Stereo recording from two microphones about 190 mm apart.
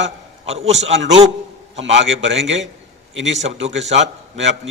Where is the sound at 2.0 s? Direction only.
75° right (ahead or behind).